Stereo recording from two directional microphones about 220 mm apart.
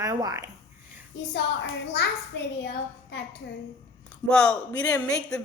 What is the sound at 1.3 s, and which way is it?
A woman's voice, 50° left (ahead or behind).